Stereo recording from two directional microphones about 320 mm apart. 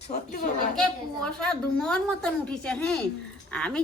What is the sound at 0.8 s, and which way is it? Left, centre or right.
A woman's voice, centre.